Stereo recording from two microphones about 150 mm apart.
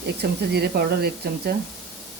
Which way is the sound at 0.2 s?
90° right.